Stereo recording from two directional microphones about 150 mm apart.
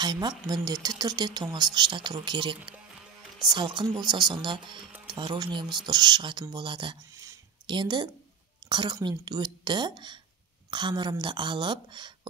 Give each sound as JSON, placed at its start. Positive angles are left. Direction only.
{"t": 0.0, "sound": "speech", "side_deg": -30}
{"t": 7.2, "sound": "a sound", "side_deg": -25}
{"t": 8.6, "sound": "speech", "side_deg": -30}